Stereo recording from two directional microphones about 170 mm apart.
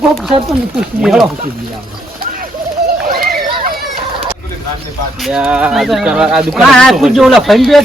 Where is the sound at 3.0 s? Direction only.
60° right (ahead or behind).